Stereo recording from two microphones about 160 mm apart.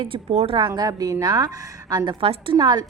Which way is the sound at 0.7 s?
25° right (ahead or behind).